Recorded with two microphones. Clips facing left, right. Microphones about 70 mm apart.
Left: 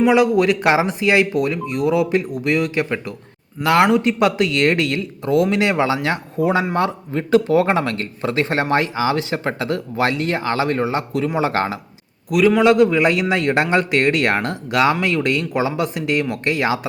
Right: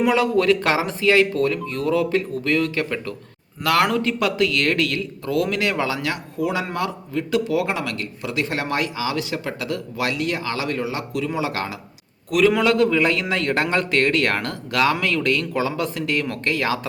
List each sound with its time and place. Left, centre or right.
0.1 s speech: centre; by 11.8 s left
12.3 s speech: centre
12.6 s speech: centre